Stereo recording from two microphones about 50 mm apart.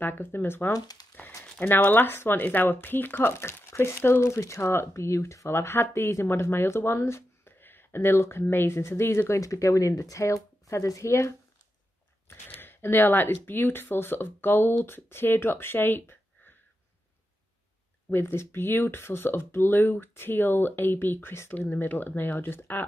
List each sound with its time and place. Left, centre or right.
0.0 s speech: left
1.9 s speech: left
5.5 s speech: left
7.6 s speech: left
9.3 s speech: left
12.3 s speech: left
18.1 s speech: left
21.5 s speech: left